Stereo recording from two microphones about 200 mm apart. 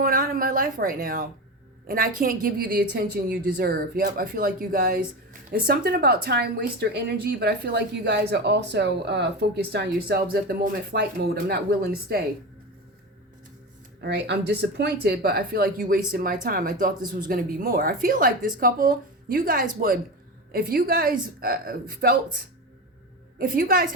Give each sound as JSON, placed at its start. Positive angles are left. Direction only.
{"t": 0.0, "sound": "speech", "side_deg": -45}
{"t": 14.0, "sound": "speech", "side_deg": -55}